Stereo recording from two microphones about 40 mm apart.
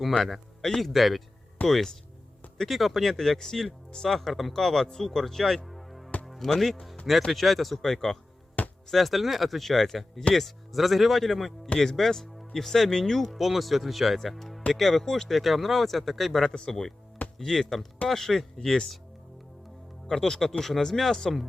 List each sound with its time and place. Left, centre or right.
0.8 s speech: centre
4.2 s speech: centre
5.6 s music: centre
6.6 s speech: centre
16.5 s speech: centre
20.1 s speech: centre